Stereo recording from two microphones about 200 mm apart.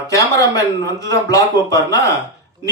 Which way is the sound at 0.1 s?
15° left (ahead or behind).